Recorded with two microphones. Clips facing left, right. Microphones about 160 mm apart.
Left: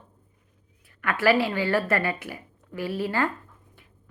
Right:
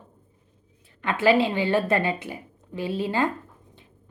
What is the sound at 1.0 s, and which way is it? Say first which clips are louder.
A woman's voice: right 2 dB; 20° right (ahead or behind).